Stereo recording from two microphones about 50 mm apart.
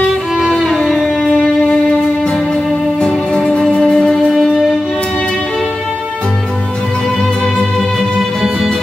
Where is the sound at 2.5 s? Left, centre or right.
Centre.